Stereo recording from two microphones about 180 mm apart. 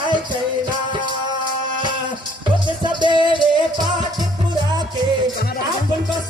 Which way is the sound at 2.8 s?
25° right (ahead or behind).